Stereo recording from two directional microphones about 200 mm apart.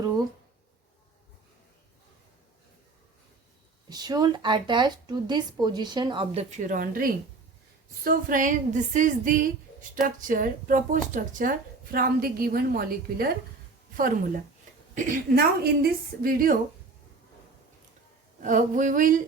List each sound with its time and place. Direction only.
3.8 s speech: 20° right (ahead or behind)
6.6 s a woman's voice: 40° right (ahead or behind)
14.9 s a woman's voice: 50° right (ahead or behind)
18.4 s speech: 40° right (ahead or behind)